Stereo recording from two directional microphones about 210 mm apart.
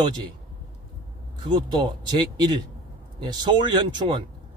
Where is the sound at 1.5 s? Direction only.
20° right (ahead or behind).